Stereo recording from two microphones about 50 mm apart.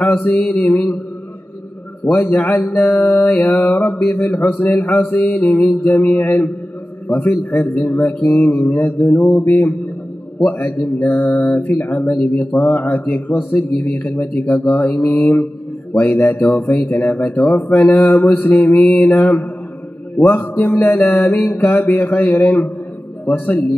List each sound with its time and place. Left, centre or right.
0.2 s speech: left
2.0 s speech: left